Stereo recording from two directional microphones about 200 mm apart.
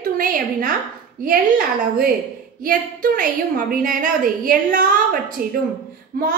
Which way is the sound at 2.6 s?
45° right (ahead or behind).